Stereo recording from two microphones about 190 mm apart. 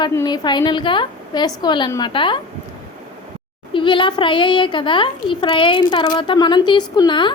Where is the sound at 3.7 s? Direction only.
25° left (ahead or behind).